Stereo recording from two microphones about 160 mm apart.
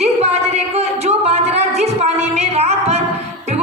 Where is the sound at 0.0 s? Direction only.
40° right (ahead or behind).